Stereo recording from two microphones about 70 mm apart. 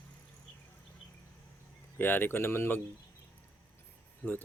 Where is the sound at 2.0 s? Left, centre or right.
Left.